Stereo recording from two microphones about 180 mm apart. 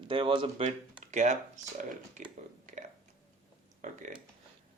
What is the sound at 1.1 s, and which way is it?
Speech, 40° right (ahead or behind).